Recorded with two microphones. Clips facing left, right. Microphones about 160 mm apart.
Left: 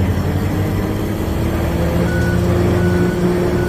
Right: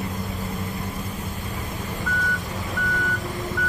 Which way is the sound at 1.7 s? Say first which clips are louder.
Left 10 dB; 90° left.